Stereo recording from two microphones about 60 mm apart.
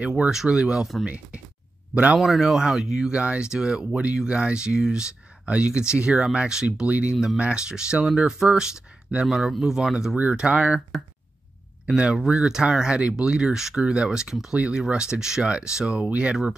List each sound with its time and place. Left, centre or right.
0.0 s speech: centre
2.1 s speech: centre
3.1 s speech: centre
11.8 s speech: centre